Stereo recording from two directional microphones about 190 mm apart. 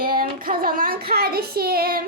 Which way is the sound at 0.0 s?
50° right (ahead or behind).